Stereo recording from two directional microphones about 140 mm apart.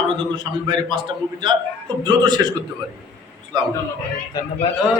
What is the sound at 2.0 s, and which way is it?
Speech, 30° right (ahead or behind).